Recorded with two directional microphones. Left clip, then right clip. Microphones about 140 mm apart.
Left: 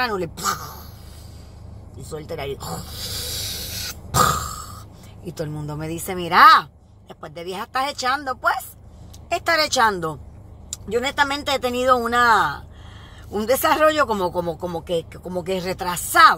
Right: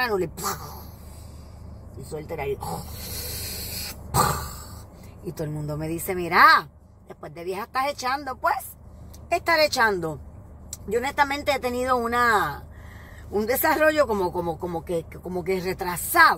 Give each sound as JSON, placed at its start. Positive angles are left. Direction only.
{"t": 0.0, "sound": "speech", "side_deg": 15}
{"t": 2.0, "sound": "hiss", "side_deg": 25}
{"t": 5.2, "sound": "speech", "side_deg": 15}